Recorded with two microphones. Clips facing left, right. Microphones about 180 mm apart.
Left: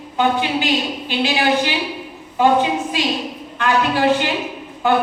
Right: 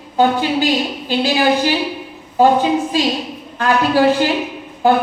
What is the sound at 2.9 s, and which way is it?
A woman's voice, 35° right (ahead or behind).